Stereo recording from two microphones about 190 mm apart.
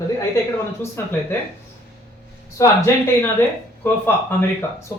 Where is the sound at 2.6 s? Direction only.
15° left (ahead or behind).